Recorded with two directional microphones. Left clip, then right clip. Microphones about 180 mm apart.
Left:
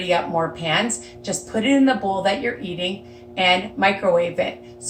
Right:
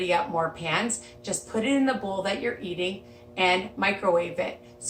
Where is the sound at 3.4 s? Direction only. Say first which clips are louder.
Left 6 dB; 15° right (ahead or behind).